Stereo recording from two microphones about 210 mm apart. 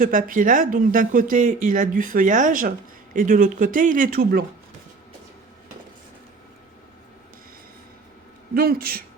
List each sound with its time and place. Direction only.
0.0 s speech: 40° right (ahead or behind)
8.5 s speech: 45° right (ahead or behind)